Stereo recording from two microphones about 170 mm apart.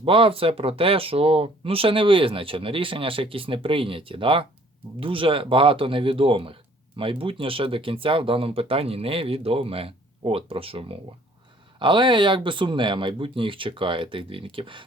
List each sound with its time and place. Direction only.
0.0 s speech: 30° right (ahead or behind)